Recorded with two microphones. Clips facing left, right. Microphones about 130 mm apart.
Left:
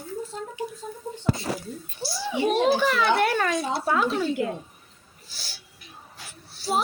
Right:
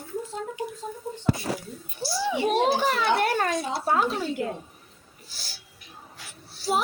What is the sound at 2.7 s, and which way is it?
A child's voice, 40° right (ahead or behind).